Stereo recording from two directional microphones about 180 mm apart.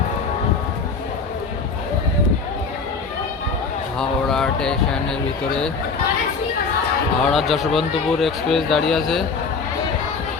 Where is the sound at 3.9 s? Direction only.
5° left (ahead or behind).